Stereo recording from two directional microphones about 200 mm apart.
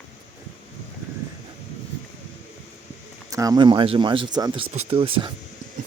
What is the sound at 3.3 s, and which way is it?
Speech, 15° right (ahead or behind).